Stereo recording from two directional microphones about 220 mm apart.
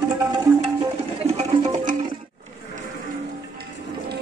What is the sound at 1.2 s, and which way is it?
Music, 30° right (ahead or behind).